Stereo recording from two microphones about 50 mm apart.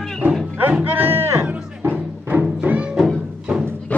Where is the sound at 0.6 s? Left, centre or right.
Right.